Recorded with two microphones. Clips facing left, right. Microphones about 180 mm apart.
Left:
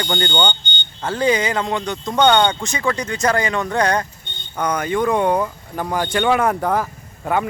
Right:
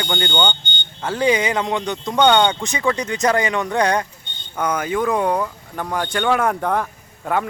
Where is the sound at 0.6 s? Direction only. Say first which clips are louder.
Left 1 dB; 50° right (ahead or behind).